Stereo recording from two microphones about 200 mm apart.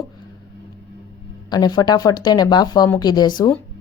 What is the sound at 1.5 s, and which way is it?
A woman's voice, 20° left (ahead or behind).